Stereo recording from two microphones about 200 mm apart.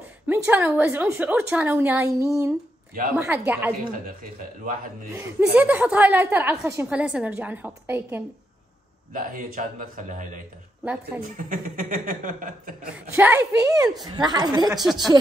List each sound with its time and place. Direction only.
0.3 s a woman's voice: 10° right (ahead or behind)
4.0 s speech: 45° right (ahead or behind)
5.1 s a woman's voice: 10° right (ahead or behind)
9.1 s speech: 45° right (ahead or behind)
10.8 s a woman's voice: 5° right (ahead or behind)
11.2 s speech: 40° right (ahead or behind)
13.1 s a woman's voice: 10° right (ahead or behind)
14.7 s a woman's voice: centre (ahead or behind)